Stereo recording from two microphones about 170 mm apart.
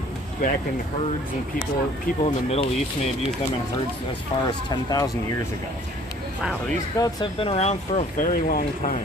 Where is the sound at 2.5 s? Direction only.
40° left (ahead or behind).